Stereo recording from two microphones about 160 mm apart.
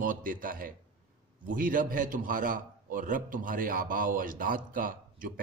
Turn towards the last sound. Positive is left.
turn(degrees=-60)  # may be behind; listen again after turning